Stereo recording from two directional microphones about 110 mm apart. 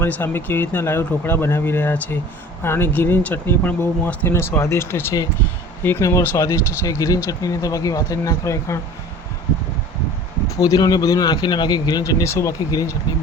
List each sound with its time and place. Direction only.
0.0 s speech: 20° left (ahead or behind)
10.6 s speech: 35° left (ahead or behind)